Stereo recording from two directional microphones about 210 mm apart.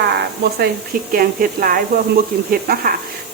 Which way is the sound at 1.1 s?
45° right (ahead or behind).